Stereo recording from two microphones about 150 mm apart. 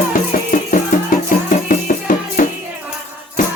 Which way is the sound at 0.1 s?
60° left (ahead or behind).